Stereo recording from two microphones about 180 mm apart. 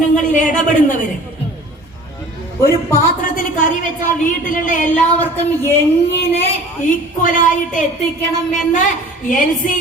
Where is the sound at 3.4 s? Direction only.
50° left (ahead or behind).